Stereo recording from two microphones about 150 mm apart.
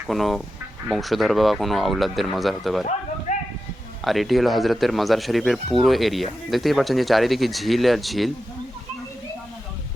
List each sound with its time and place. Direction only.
0.1 s speech: centre (ahead or behind)
3.3 s a sound: 50° left (ahead or behind)
4.0 s speech: centre (ahead or behind)